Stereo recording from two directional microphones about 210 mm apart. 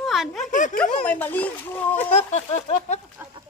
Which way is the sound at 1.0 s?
10° left (ahead or behind).